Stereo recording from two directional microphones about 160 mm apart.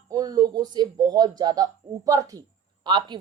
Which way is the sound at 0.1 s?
25° right (ahead or behind).